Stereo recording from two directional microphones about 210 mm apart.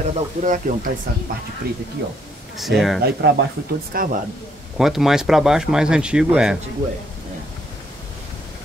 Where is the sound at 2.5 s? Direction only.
Centre (ahead or behind).